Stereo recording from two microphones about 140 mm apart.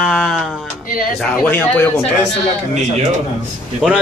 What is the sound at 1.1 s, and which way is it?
Speech, 10° left (ahead or behind).